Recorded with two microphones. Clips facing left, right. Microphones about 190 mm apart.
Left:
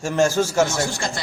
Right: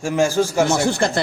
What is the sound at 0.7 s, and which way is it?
Speech, 60° right (ahead or behind).